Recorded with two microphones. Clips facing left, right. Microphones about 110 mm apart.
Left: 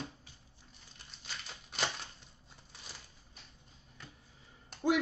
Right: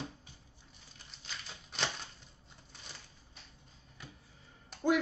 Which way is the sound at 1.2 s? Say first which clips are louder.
Left 1 dB; 5° left (ahead or behind).